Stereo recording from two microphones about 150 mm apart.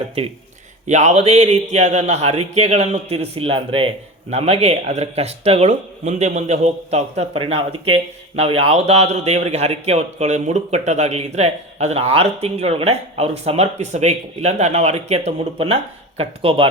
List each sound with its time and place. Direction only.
0.9 s speech: 50° right (ahead or behind)